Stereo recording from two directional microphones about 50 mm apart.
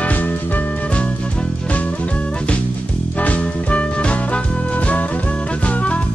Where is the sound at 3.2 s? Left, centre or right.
Left.